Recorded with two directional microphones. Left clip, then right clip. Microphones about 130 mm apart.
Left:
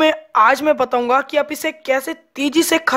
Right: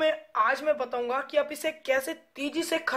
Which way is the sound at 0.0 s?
50° left (ahead or behind).